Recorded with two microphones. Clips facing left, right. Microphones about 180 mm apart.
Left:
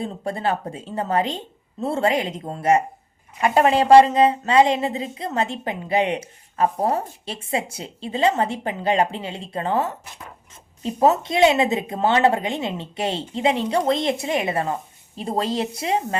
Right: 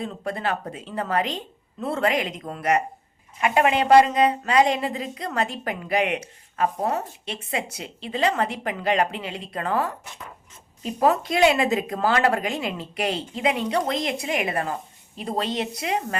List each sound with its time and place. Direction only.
0.0 s a woman's voice: 30° left (ahead or behind)